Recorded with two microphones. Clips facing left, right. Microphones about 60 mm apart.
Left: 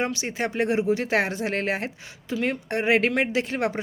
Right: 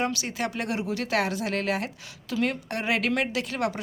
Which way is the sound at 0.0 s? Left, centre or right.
Left.